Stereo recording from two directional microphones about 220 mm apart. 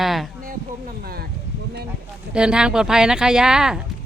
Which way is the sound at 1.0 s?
45° right (ahead or behind).